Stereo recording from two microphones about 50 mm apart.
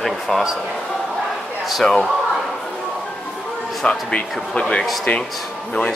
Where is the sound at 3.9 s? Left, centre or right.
Left.